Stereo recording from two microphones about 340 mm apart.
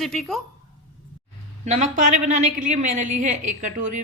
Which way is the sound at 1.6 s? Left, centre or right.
Right.